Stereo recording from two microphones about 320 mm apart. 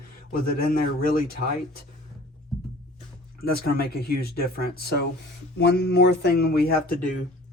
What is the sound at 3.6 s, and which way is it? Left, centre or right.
Speech, left.